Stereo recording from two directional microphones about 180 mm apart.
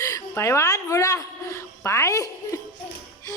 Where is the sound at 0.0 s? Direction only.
15° left (ahead or behind).